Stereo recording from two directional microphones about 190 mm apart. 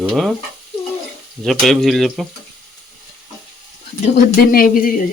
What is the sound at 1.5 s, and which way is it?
Speech, centre (ahead or behind).